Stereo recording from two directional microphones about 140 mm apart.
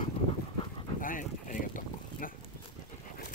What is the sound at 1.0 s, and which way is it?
Boat, 70° left (ahead or behind).